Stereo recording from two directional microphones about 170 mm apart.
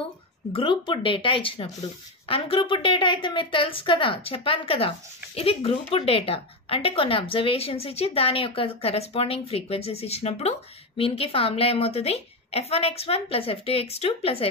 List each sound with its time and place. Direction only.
0.5 s a woman's voice: 30° left (ahead or behind)